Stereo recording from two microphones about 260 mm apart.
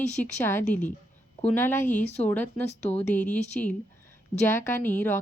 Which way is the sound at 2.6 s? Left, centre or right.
Left.